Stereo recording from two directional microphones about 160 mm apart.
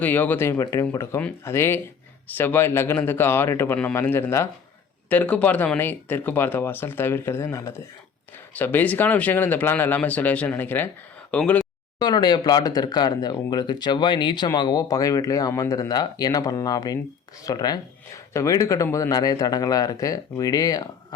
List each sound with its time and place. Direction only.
0.0 s speech: 10° left (ahead or behind)
11.9 s speech: 25° left (ahead or behind)